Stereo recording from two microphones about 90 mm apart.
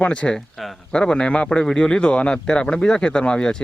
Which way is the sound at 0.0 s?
10° left (ahead or behind).